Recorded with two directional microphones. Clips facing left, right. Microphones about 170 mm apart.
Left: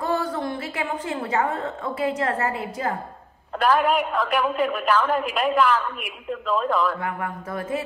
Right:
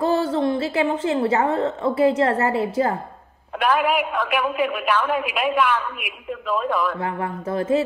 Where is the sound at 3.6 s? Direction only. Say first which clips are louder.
Even; 10° right (ahead or behind).